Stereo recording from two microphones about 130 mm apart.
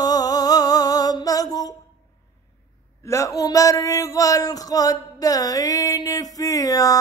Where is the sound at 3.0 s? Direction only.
25° left (ahead or behind).